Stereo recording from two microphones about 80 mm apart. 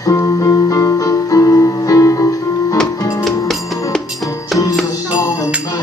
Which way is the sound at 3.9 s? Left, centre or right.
Centre.